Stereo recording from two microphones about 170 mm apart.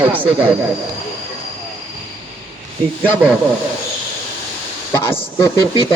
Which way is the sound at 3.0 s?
5° right (ahead or behind).